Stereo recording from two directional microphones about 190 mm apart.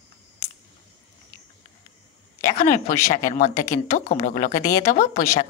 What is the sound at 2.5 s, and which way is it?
Speech, 40° left (ahead or behind).